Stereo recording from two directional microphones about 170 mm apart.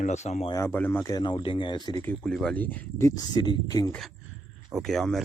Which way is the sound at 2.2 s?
5° left (ahead or behind).